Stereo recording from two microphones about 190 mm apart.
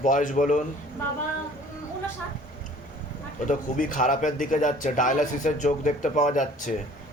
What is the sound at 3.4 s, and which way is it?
A man's voice, 45° left (ahead or behind).